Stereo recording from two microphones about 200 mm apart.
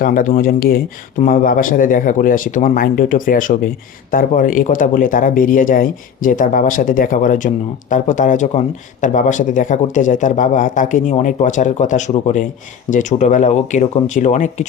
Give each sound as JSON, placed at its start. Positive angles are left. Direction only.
{"t": 0.0, "sound": "speech", "side_deg": 45}